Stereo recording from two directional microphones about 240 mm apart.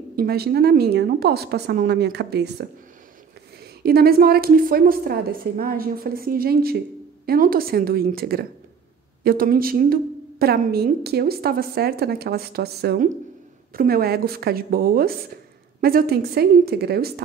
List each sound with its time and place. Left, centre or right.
0.1 s a woman's voice: right
3.8 s a woman's voice: right